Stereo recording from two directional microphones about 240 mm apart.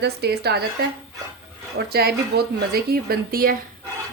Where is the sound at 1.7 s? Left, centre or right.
Right.